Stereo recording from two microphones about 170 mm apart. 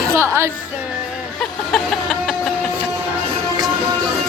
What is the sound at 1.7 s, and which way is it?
Chicken, 5° left (ahead or behind).